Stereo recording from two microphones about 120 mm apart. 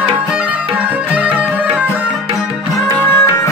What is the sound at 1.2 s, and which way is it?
Music, 10° right (ahead or behind).